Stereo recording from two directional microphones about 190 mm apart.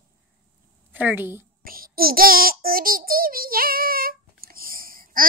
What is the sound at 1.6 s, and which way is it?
Child singing, 50° right (ahead or behind).